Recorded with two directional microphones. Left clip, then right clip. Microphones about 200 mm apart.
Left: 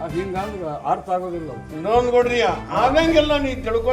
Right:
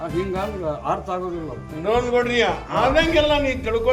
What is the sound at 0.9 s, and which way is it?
Speech, 15° right (ahead or behind).